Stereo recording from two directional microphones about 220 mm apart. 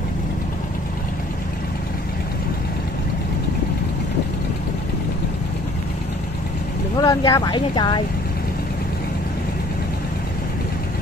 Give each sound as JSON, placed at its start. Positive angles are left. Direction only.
{"t": 7.0, "sound": "speech", "side_deg": 15}